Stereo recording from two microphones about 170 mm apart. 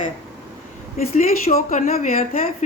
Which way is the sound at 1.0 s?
60° left (ahead or behind).